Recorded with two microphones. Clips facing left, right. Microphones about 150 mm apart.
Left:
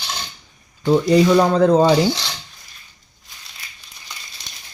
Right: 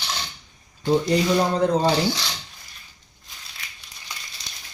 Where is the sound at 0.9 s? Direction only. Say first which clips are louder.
Left 6 dB; 90° left.